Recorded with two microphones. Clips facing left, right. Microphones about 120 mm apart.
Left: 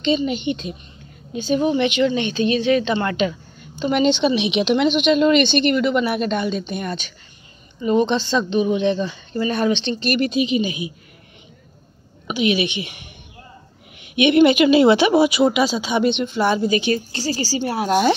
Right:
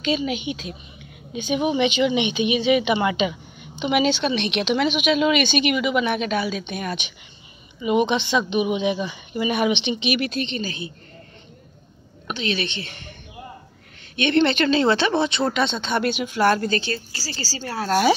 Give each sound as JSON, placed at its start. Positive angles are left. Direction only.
{"t": 0.0, "sound": "a woman's voice", "side_deg": -5}
{"t": 1.3, "sound": "a woman's voice", "side_deg": -15}
{"t": 2.3, "sound": "a woman's voice", "side_deg": -5}
{"t": 3.9, "sound": "a woman's voice", "side_deg": -5}
{"t": 10.0, "sound": "a woman's voice", "side_deg": 0}
{"t": 12.3, "sound": "speech", "side_deg": 10}
{"t": 14.1, "sound": "speech", "side_deg": 15}
{"t": 16.0, "sound": "a woman's voice", "side_deg": -5}
{"t": 16.5, "sound": "speech", "side_deg": 15}